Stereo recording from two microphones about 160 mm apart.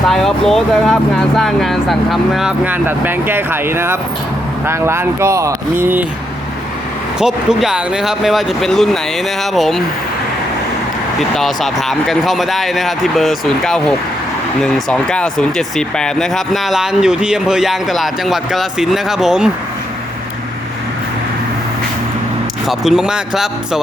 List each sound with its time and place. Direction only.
0.1 s speech: centre (ahead or behind)
7.2 s speech: 5° right (ahead or behind)
11.2 s speech: centre (ahead or behind)
22.6 s speech: centre (ahead or behind)